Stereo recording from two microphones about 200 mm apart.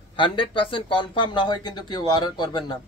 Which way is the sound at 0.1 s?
25° left (ahead or behind).